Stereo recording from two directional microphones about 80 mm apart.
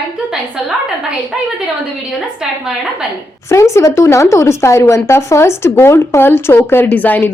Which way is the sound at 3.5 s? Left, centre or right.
Left.